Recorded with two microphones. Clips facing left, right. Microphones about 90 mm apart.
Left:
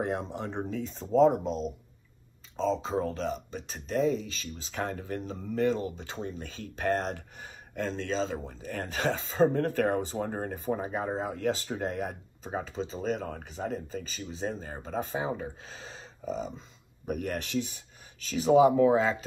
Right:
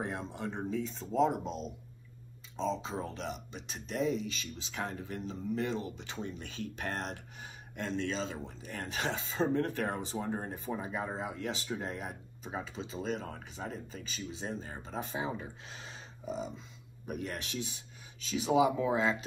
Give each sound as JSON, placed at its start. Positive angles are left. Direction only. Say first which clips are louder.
{"t": 0.0, "sound": "speech", "louder": "left 5 dB", "side_deg": 55}
{"t": 2.5, "sound": "speech", "louder": "left 6 dB", "side_deg": 40}
{"t": 4.8, "sound": "speech", "louder": "left 5 dB", "side_deg": 50}
{"t": 8.5, "sound": "speech", "louder": "left 5 dB", "side_deg": 45}
{"t": 12.5, "sound": "speech", "louder": "left 5 dB", "side_deg": 35}